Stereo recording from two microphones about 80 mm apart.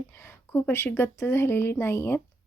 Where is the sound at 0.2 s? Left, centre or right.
Left.